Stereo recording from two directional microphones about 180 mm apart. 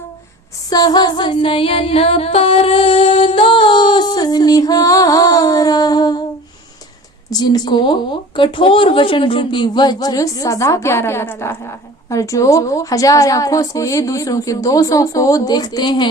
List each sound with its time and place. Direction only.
0.7 s female singing: 20° left (ahead or behind)
7.3 s a woman's voice: 20° left (ahead or behind)